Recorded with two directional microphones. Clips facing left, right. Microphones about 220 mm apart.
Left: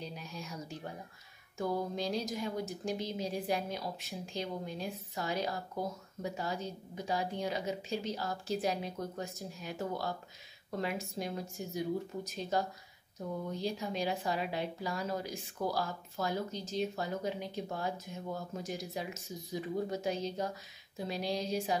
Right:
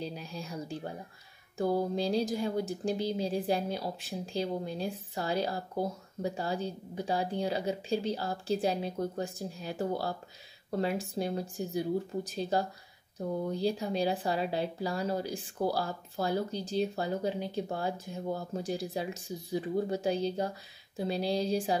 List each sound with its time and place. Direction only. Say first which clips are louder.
0.0 s speech: right 5 dB; 30° right (ahead or behind)